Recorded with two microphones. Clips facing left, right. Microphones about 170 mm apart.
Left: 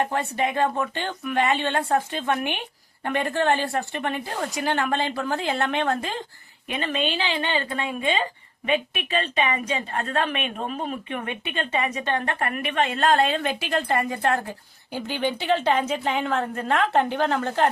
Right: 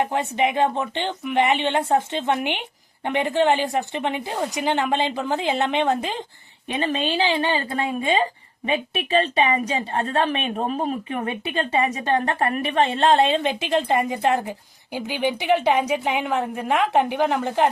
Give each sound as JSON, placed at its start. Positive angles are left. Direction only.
{"t": 0.0, "sound": "speech", "side_deg": -20}
{"t": 6.7, "sound": "speech", "side_deg": -30}